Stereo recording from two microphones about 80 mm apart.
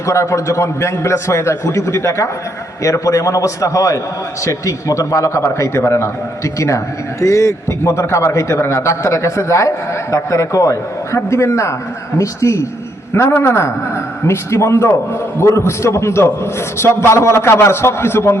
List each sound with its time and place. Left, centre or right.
0.0 s a man's voice: left